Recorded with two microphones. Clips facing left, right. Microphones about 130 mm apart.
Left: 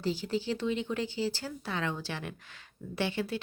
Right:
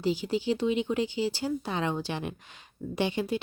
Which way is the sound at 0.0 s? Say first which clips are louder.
Right 4 dB; 15° right (ahead or behind).